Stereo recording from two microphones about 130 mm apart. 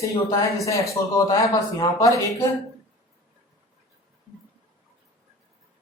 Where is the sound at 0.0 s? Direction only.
25° left (ahead or behind).